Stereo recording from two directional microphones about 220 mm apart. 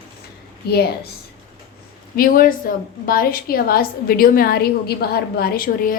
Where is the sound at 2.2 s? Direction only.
40° left (ahead or behind).